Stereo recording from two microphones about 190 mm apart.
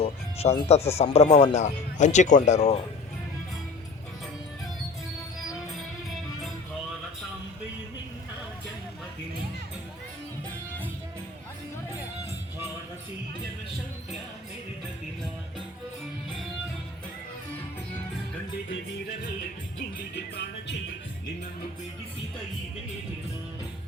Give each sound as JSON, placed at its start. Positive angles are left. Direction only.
{"t": 0.0, "sound": "music", "side_deg": 35}
{"t": 0.9, "sound": "speech", "side_deg": 35}
{"t": 18.7, "sound": "music", "side_deg": 70}